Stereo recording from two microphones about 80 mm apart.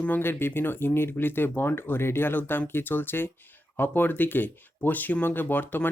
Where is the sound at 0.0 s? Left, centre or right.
Left.